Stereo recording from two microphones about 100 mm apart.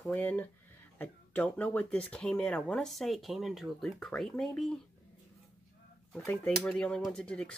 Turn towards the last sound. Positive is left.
turn(degrees=10)  # may be behind; listen again after turning